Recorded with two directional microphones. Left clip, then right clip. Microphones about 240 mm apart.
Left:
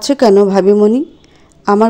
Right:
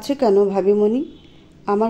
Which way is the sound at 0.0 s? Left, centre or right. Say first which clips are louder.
Left 7 dB; left.